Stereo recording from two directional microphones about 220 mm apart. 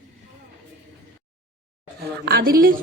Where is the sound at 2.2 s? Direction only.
45° right (ahead or behind).